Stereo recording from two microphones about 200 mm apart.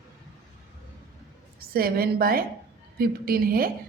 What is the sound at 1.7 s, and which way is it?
A woman's voice, 50° right (ahead or behind).